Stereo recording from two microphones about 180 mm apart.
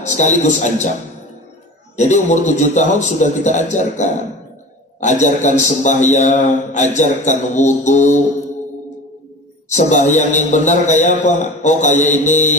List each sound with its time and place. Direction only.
0.0 s a man's voice: 40° left (ahead or behind)
2.0 s a man's voice: 40° left (ahead or behind)
9.7 s a man's voice: 40° left (ahead or behind)